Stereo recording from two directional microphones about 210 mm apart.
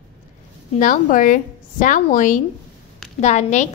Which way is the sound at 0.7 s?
40° left (ahead or behind).